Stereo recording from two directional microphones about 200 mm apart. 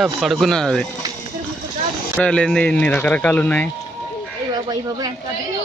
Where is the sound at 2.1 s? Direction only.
5° left (ahead or behind).